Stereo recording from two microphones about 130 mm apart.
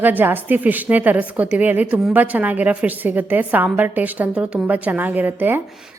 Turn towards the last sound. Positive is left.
turn(degrees=-5)  # may be behind; listen again after turning